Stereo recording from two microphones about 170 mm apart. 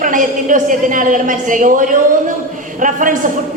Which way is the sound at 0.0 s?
50° right (ahead or behind).